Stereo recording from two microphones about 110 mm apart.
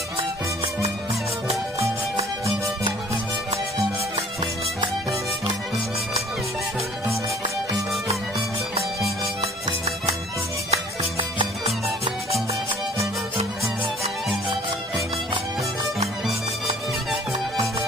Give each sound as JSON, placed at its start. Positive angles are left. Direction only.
{"t": 9.4, "sound": "music", "side_deg": -70}
{"t": 10.7, "sound": "music", "side_deg": -60}